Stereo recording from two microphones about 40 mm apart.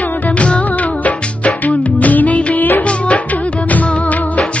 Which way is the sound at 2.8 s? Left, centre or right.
Left.